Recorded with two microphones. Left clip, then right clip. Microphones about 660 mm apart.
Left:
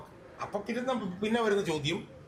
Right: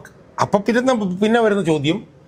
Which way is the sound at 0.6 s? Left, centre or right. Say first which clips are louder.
Right 15 dB; right.